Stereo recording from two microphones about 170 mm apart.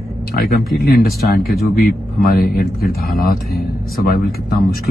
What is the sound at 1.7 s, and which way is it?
Speech, 65° left (ahead or behind).